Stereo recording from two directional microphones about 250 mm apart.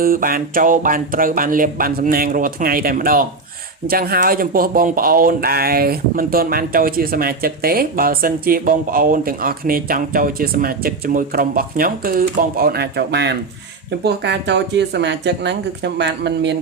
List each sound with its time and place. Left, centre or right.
0.0 s speech: right